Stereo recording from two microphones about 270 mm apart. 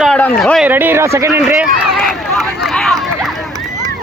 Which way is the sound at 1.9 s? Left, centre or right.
Centre.